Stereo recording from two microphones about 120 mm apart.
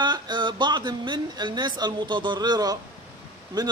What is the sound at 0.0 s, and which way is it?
A man's voice, 40° right (ahead or behind).